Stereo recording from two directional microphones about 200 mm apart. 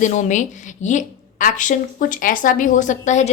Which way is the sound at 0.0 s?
35° left (ahead or behind).